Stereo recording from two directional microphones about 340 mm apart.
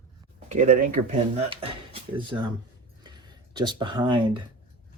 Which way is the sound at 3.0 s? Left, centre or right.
Centre.